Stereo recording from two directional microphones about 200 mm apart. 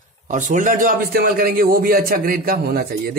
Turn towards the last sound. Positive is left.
turn(degrees=-50)  # may be behind; listen again after turning